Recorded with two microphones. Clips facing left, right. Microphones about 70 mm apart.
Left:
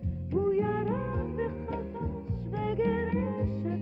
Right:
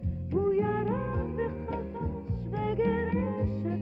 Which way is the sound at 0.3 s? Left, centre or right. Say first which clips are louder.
Right 1 dB; right.